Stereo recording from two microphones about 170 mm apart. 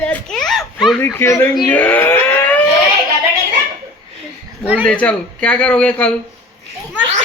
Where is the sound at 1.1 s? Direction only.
15° left (ahead or behind).